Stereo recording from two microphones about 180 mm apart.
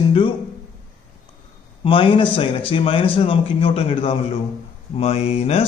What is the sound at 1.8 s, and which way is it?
Speech, 30° left (ahead or behind).